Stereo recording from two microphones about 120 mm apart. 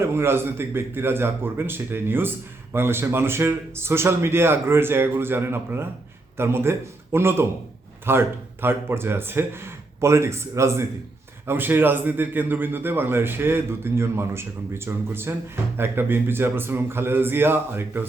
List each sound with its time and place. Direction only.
0.0 s a man's voice: 20° right (ahead or behind)